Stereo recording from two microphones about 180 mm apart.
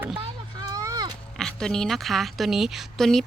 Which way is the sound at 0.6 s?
20° right (ahead or behind).